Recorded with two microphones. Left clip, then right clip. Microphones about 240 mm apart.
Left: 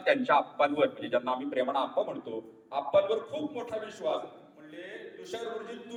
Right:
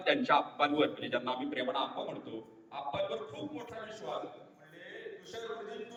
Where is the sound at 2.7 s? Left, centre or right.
Left.